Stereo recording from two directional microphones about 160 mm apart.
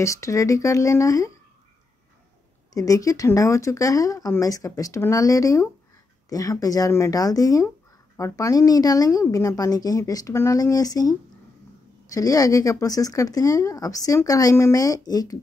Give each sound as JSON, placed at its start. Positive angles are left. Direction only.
{"t": 0.0, "sound": "speech", "side_deg": 20}
{"t": 2.7, "sound": "speech", "side_deg": 20}